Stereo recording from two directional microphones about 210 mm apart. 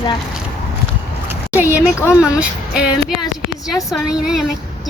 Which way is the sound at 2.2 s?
5° right (ahead or behind).